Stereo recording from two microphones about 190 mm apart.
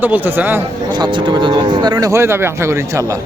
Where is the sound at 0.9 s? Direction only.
25° right (ahead or behind).